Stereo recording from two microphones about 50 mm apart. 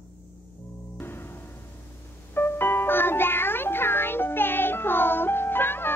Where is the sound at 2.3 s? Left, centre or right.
Left.